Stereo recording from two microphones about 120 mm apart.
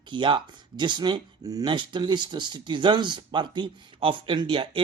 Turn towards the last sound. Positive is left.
turn(degrees=-45)  # may be behind; listen again after turning